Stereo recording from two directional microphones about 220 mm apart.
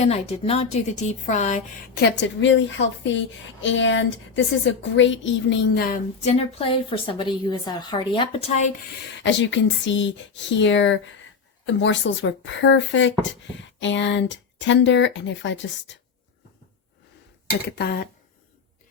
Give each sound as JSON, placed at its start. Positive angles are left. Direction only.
{"t": 0.0, "sound": "a woman's voice", "side_deg": 25}
{"t": 2.0, "sound": "a woman's voice", "side_deg": 50}
{"t": 6.2, "sound": "a woman's voice", "side_deg": 30}
{"t": 9.1, "sound": "a woman's voice", "side_deg": 55}
{"t": 17.7, "sound": "speech", "side_deg": 45}